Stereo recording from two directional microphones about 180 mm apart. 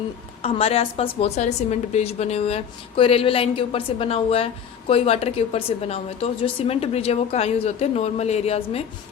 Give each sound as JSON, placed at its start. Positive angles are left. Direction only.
{"t": 0.4, "sound": "a woman's voice", "side_deg": 35}